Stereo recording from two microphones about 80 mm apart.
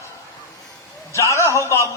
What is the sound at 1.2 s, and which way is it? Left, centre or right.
Speech, left.